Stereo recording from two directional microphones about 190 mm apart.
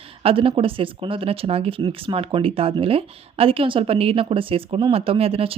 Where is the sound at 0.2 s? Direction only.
30° right (ahead or behind).